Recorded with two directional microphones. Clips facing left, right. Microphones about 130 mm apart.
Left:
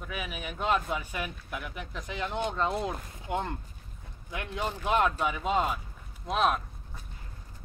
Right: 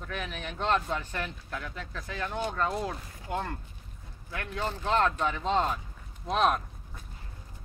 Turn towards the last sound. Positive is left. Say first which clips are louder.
# right 1 dB
turn(degrees=0)  # may be behind; listen again after turning